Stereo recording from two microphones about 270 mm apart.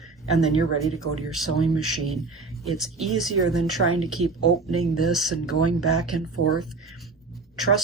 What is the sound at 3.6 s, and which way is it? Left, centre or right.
Speech, right.